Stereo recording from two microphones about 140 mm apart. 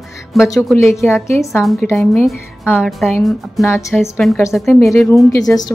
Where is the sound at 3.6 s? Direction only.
20° left (ahead or behind).